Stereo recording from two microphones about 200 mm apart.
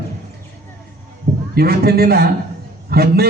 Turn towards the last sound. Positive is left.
turn(degrees=-50)  # may be behind; listen again after turning